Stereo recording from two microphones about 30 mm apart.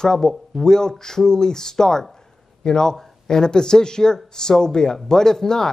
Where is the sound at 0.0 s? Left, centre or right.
Centre.